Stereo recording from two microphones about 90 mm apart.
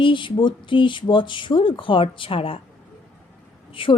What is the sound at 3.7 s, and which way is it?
Speech, 75° left (ahead or behind).